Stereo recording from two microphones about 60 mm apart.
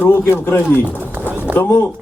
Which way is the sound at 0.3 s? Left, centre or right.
Left.